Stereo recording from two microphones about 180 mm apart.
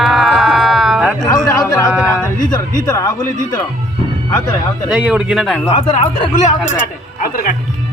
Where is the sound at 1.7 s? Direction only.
20° left (ahead or behind).